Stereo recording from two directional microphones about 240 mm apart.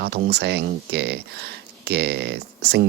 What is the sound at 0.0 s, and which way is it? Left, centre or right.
Speech, right.